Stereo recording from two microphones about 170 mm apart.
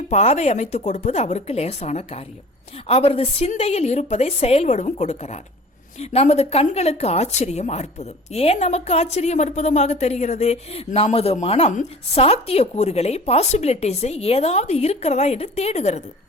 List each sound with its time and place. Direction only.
0.1 s speech: 40° left (ahead or behind)